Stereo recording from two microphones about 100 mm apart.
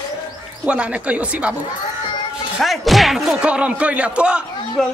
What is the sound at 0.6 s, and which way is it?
Speech, 10° right (ahead or behind).